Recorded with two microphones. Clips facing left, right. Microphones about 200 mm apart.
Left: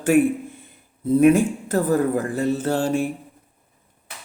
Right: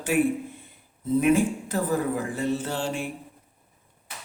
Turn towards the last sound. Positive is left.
turn(degrees=40)  # may be behind; listen again after turning